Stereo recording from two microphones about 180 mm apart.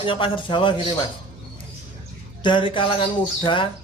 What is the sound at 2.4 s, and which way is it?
Speech, 25° left (ahead or behind).